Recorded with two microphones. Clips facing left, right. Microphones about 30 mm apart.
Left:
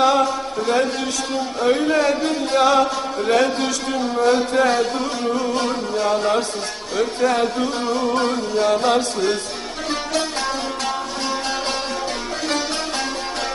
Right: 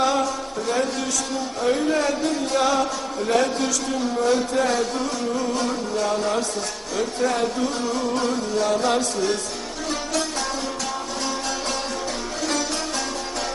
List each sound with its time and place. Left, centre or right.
0.0 s a sound: left
1.6 s speech: left
8.1 s music: left